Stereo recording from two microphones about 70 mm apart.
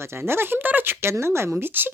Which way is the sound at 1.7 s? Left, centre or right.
Right.